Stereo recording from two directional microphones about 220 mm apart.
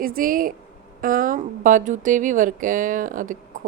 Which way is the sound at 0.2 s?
40° right (ahead or behind).